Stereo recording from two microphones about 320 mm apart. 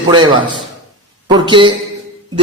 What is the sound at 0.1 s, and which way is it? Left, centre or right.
Speech, centre.